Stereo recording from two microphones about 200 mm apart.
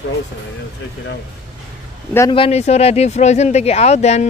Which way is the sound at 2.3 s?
30° left (ahead or behind).